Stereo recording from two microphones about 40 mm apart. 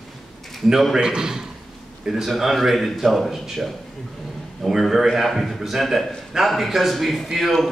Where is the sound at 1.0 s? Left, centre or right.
Centre.